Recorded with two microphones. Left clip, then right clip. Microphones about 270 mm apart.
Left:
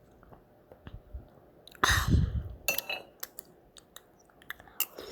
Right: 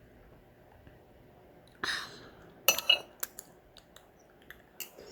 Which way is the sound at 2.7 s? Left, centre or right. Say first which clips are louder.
Right 9 dB; centre.